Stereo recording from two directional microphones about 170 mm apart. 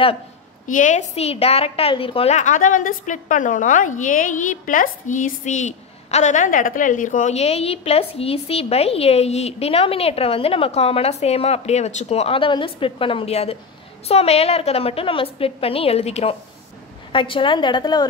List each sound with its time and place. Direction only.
0.7 s a woman's voice: 50° left (ahead or behind); by 18.0 s 25° left (ahead or behind)